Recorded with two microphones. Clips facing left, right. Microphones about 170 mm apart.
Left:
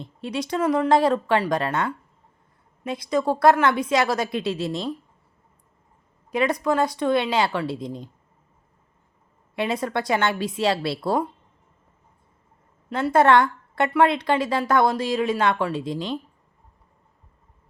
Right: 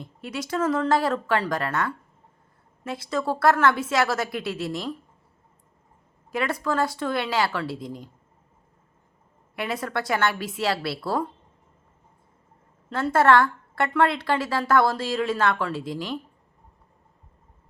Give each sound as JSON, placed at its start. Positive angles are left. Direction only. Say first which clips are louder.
{"t": 0.0, "sound": "a woman's voice", "louder": "left 4 dB", "side_deg": 20}
{"t": 6.3, "sound": "a woman's voice", "louder": "left 4 dB", "side_deg": 20}
{"t": 9.6, "sound": "a woman's voice", "louder": "left 4 dB", "side_deg": 20}
{"t": 12.9, "sound": "a woman's voice", "louder": "left 2 dB", "side_deg": 20}